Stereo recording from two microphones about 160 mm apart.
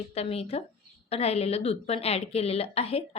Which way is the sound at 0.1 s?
40° left (ahead or behind).